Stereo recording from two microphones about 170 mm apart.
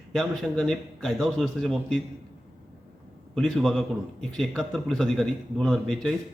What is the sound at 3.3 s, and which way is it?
Speech, centre (ahead or behind).